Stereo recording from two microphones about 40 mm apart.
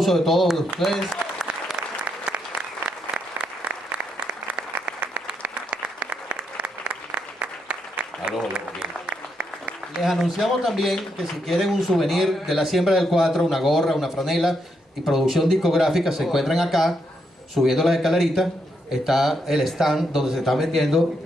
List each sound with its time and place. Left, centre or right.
0.0 s speech: centre
5.5 s applause: right
10.0 s speech: centre